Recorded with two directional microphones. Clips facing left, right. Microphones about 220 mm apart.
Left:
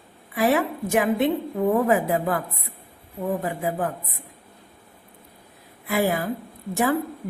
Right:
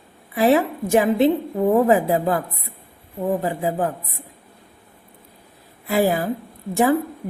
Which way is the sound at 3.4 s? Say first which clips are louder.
Right 4 dB; 30° right (ahead or behind).